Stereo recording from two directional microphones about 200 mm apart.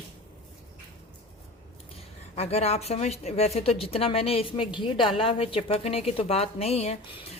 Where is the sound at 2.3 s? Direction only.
30° left (ahead or behind).